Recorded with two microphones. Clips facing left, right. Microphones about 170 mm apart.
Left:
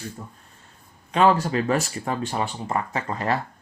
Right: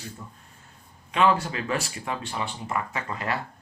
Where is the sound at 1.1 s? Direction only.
40° left (ahead or behind).